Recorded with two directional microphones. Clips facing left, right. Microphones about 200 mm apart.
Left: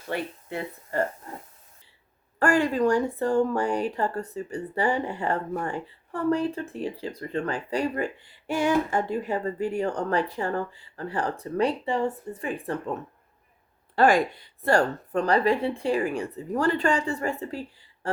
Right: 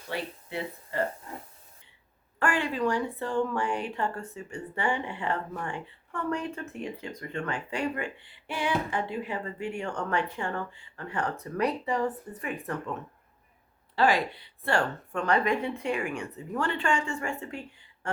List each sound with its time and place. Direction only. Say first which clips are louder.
0.1 s speech: left 4 dB; 45° left (ahead or behind)
2.4 s a woman's voice: left 6 dB; 40° left (ahead or behind)
13.9 s a woman's voice: left 5 dB; 50° left (ahead or behind)